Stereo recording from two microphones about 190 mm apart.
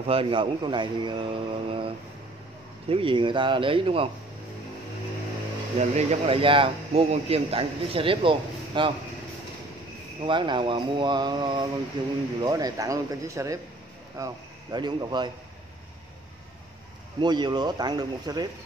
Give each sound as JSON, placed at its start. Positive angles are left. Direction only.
{"t": 0.0, "sound": "a man's voice", "side_deg": -30}
{"t": 2.9, "sound": "a man's voice", "side_deg": -25}
{"t": 5.8, "sound": "a man's voice", "side_deg": -35}
{"t": 10.2, "sound": "a man's voice", "side_deg": -25}
{"t": 17.2, "sound": "a man's voice", "side_deg": -20}